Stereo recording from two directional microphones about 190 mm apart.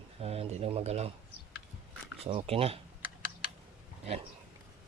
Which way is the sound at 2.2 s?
30° right (ahead or behind).